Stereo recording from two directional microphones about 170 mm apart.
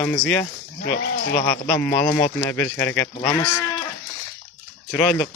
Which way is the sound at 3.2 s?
25° left (ahead or behind).